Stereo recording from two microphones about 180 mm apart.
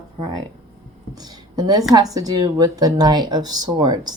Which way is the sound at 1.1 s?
20° right (ahead or behind).